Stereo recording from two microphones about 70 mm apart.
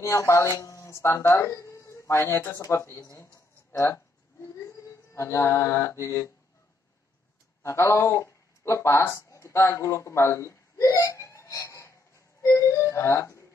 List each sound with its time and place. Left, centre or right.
0.0 s speech: left
1.5 s speech: left
3.7 s a sound: left
7.6 s speech: left
11.6 s a sound: left
12.4 s music: left